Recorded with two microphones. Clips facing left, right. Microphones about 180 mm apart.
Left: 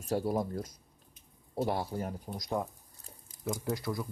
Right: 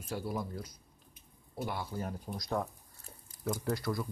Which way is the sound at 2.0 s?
20° left (ahead or behind).